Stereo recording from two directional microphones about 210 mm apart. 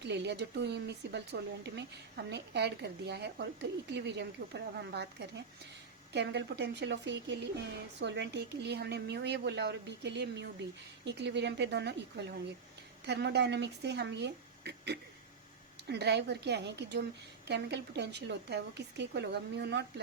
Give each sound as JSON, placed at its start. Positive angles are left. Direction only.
{"t": 0.0, "sound": "speech", "side_deg": -55}